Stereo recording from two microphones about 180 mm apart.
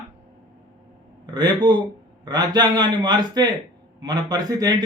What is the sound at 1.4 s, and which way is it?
A man's voice, 25° right (ahead or behind).